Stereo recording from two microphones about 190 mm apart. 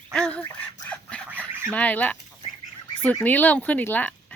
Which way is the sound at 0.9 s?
5° left (ahead or behind).